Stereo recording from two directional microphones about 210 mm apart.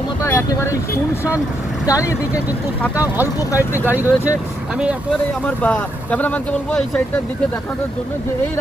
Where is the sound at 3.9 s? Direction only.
10° right (ahead or behind).